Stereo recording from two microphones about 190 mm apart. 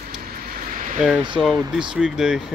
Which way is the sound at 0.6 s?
45° right (ahead or behind).